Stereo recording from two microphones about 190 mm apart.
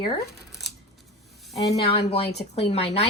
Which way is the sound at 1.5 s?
35° left (ahead or behind).